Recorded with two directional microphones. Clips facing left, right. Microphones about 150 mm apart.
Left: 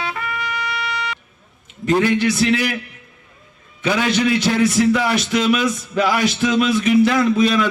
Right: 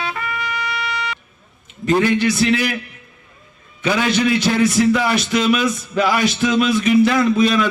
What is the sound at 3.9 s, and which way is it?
A man's voice, 20° left (ahead or behind).